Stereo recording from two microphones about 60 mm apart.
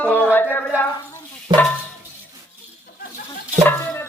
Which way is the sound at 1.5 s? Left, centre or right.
Right.